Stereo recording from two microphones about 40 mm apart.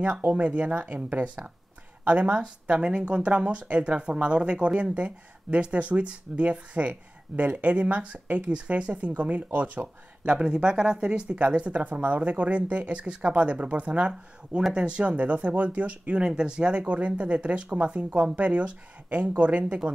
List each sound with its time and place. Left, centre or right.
0.0 s speech: right
0.4 s speech: right
0.8 s speech: right
10.2 s speech: right
16.2 s speech: right